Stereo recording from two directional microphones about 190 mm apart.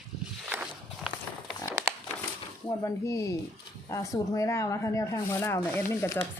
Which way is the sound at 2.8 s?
15° left (ahead or behind).